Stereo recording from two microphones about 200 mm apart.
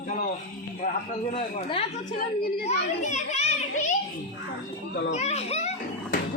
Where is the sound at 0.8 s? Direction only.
35° left (ahead or behind).